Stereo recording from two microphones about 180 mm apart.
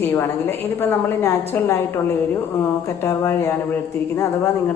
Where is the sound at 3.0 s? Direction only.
15° left (ahead or behind).